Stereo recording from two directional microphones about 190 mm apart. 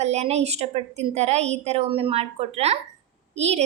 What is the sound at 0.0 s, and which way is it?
A woman's voice, 35° right (ahead or behind).